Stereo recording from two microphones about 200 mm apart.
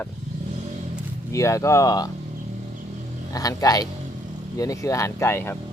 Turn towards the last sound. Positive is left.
turn(degrees=10)  # may be behind; listen again after turning